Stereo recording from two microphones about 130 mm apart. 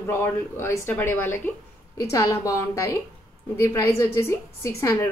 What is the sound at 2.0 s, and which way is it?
A woman's voice, 25° left (ahead or behind).